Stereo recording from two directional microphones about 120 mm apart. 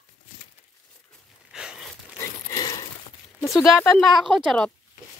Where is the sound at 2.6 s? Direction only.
35° left (ahead or behind).